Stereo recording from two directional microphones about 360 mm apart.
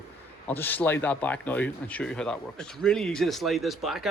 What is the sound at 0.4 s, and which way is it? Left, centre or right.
Speech, centre.